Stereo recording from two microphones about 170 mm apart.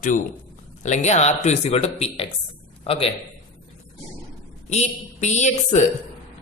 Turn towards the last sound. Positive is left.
turn(degrees=45)  # may be behind; listen again after turning